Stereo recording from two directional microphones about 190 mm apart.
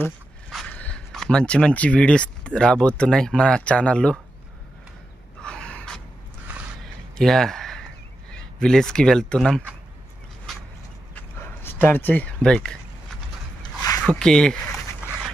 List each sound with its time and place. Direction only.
0.5 s speech: 5° left (ahead or behind)
5.4 s gasp: 5° left (ahead or behind)
7.2 s speech: centre (ahead or behind)
10.5 s a sound: centre (ahead or behind)
13.6 s a sound: 20° left (ahead or behind)
14.0 s speech: 5° left (ahead or behind)